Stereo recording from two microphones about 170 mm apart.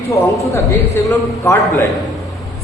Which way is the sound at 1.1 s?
15° left (ahead or behind).